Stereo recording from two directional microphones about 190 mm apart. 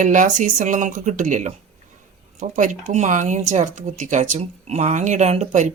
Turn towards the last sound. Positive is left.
turn(degrees=-35)  # may be behind; listen again after turning